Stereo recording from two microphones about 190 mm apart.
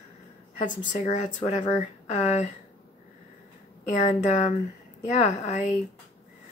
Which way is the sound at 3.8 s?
40° left (ahead or behind).